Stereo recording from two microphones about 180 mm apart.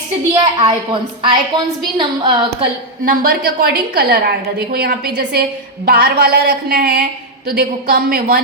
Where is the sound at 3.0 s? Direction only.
55° right (ahead or behind).